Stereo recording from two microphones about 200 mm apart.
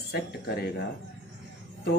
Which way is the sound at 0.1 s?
50° left (ahead or behind).